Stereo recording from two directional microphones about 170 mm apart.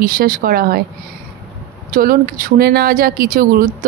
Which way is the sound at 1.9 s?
55° right (ahead or behind).